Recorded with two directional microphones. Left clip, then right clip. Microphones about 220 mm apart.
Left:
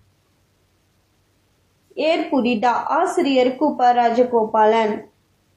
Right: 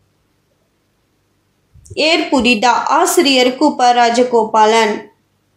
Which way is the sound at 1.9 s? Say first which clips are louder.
Right 6 dB; 45° right (ahead or behind).